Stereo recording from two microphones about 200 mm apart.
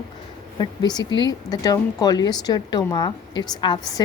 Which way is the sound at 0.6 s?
20° left (ahead or behind).